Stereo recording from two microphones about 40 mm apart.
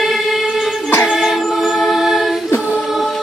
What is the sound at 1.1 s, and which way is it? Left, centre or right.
Choir, centre.